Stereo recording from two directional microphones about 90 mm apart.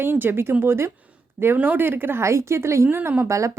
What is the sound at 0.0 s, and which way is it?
Speech, 25° right (ahead or behind).